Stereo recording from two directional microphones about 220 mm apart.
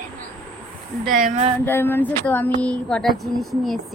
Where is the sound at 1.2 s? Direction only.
35° right (ahead or behind).